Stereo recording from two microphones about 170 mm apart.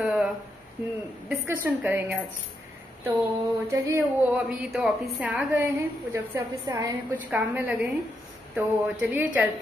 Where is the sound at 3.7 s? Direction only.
10° right (ahead or behind).